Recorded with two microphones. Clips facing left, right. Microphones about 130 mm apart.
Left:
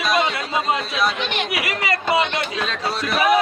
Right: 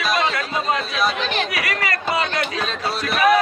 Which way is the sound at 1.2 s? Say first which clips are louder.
Right 2 dB; 35° right (ahead or behind).